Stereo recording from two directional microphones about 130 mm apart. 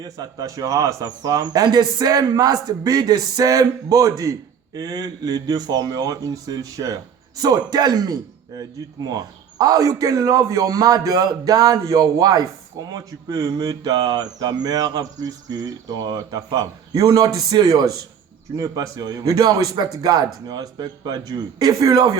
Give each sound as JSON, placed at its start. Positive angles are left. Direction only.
{"t": 0.0, "sound": "speech", "side_deg": -25}